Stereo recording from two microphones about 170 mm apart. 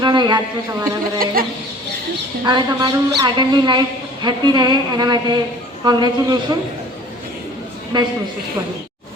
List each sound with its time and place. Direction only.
0.0 s speech: 25° right (ahead or behind)
2.4 s speech: 25° right (ahead or behind)
7.9 s speech: 25° right (ahead or behind)